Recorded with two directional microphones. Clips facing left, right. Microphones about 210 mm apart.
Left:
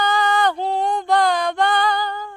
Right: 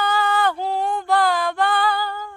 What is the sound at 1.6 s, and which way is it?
Female singing, 5° right (ahead or behind).